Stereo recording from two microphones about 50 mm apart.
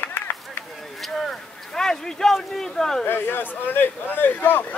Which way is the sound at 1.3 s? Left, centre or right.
Centre.